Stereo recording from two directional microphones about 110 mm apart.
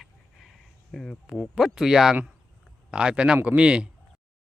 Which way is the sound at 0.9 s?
5° left (ahead or behind).